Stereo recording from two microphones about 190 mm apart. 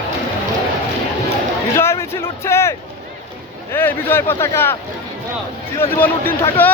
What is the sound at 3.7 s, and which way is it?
Speech, 10° left (ahead or behind).